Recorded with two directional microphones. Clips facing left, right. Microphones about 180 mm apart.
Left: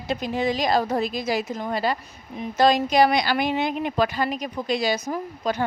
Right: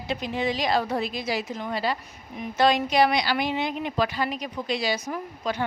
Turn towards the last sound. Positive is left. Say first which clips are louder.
# left 3 dB
turn(degrees=45)  # may be behind; listen again after turning